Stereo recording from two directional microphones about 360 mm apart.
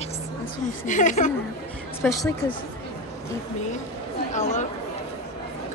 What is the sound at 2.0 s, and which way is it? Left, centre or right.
Speech, centre.